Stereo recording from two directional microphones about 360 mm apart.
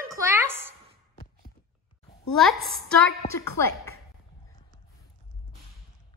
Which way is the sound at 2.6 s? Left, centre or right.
Centre.